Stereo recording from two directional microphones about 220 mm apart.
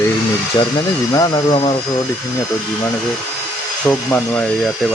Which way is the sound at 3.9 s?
5° left (ahead or behind).